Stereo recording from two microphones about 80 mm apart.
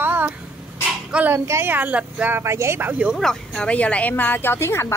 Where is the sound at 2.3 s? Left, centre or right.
Right.